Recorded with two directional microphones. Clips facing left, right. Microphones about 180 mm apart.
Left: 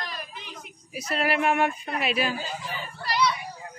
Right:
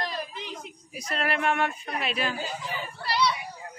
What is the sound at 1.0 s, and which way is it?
Speech, 5° left (ahead or behind).